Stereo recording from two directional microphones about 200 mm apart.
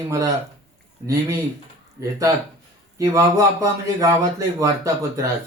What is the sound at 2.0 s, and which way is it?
Speech, 15° right (ahead or behind).